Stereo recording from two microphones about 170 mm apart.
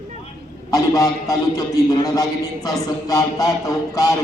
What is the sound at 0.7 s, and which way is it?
A man's voice, 20° left (ahead or behind).